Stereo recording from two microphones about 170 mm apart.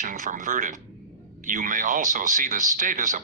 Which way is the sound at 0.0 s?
50° right (ahead or behind).